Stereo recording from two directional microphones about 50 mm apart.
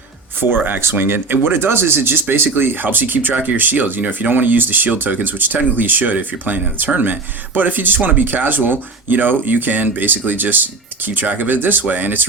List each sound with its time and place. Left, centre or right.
0.3 s speech: right